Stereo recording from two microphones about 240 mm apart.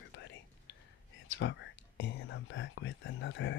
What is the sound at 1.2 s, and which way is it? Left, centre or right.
Speech, left.